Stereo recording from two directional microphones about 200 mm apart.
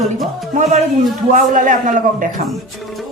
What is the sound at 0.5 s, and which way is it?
A man's voice, 35° right (ahead or behind).